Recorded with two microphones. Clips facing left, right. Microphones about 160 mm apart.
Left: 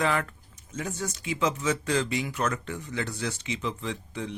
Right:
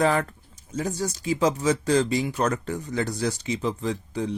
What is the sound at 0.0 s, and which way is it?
Speech, 35° right (ahead or behind).